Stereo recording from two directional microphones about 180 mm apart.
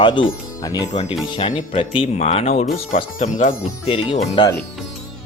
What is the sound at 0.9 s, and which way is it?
Speech, 40° left (ahead or behind).